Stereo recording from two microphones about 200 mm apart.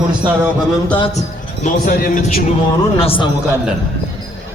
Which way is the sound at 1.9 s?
45° left (ahead or behind).